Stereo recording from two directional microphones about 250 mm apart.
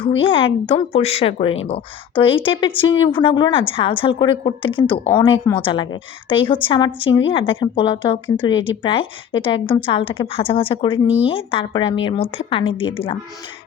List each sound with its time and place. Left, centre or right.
0.2 s speech: left